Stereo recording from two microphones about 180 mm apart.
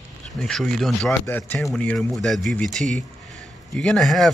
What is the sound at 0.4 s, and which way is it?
A man's voice, 5° left (ahead or behind).